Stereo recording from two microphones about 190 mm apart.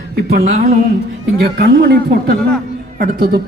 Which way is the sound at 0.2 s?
55° right (ahead or behind).